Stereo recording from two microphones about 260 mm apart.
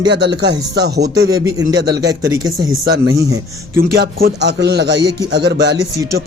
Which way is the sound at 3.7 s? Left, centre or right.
Right.